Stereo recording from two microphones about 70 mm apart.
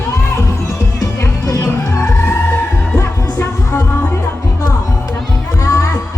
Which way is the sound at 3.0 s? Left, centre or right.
Left.